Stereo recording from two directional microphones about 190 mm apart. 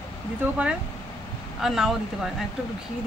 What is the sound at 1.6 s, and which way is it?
Speech, centre (ahead or behind).